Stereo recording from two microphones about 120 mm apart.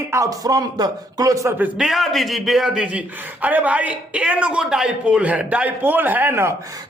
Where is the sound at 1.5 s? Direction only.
15° right (ahead or behind).